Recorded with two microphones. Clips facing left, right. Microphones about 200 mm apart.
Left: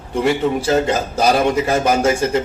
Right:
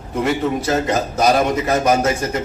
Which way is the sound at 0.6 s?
30° left (ahead or behind).